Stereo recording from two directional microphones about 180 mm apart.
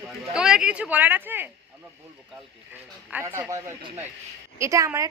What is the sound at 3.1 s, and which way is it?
A woman's voice, 10° right (ahead or behind).